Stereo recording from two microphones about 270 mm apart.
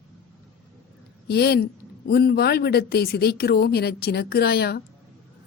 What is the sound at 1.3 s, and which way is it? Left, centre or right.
Speech, left.